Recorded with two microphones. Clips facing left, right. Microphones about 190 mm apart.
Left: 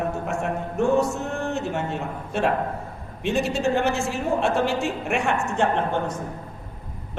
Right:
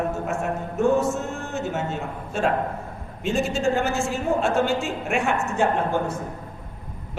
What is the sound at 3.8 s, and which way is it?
A man's voice, centre (ahead or behind).